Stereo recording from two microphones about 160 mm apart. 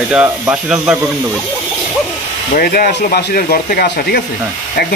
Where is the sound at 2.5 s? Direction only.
65° left (ahead or behind).